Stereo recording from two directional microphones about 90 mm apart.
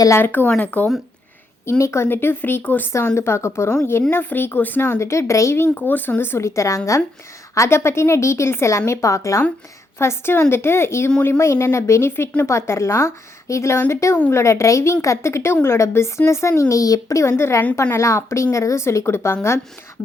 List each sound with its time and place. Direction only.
0.2 s speech: 20° left (ahead or behind)
1.8 s speech: 30° left (ahead or behind)
4.9 s speech: 30° left (ahead or behind)